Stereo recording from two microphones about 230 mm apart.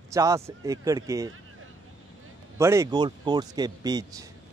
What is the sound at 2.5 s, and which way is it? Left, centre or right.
Speech, centre.